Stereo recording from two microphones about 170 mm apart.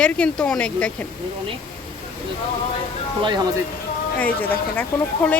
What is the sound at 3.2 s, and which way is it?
Speech, 25° right (ahead or behind).